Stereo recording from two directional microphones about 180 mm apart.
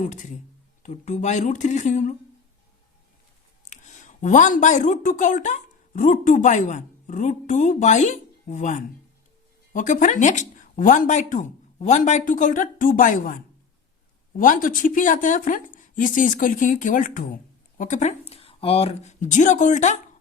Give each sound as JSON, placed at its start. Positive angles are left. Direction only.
{"t": 0.0, "sound": "speech", "side_deg": 45}
{"t": 3.6, "sound": "speech", "side_deg": 40}
{"t": 14.3, "sound": "speech", "side_deg": 50}